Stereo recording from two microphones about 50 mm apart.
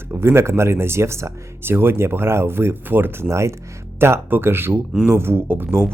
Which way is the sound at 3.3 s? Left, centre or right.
Right.